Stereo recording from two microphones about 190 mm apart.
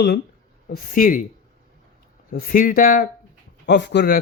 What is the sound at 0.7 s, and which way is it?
Speech, 45° left (ahead or behind).